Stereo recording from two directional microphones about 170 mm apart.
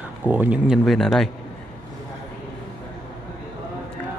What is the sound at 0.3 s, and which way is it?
Speech, 10° right (ahead or behind).